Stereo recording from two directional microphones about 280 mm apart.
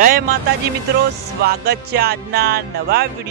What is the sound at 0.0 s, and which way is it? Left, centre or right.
Speech, right.